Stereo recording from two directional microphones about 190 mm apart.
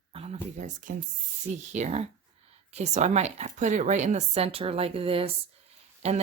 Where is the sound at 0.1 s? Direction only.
30° right (ahead or behind).